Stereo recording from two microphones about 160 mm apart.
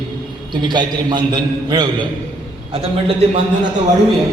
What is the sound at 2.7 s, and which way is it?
Speech, 35° right (ahead or behind).